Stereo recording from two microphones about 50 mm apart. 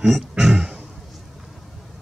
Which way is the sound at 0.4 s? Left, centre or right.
Centre.